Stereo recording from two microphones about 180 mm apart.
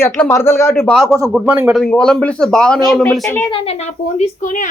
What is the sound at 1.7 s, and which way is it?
Speech, 5° left (ahead or behind).